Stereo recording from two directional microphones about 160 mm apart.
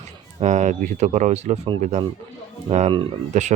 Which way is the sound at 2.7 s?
45° right (ahead or behind).